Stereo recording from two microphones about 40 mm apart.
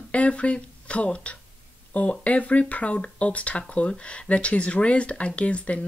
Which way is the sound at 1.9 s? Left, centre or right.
Left.